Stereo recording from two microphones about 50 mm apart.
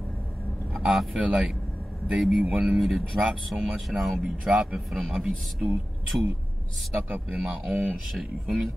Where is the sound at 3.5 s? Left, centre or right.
Right.